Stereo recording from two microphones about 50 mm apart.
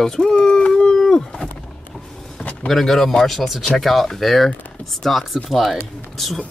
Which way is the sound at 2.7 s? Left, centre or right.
Centre.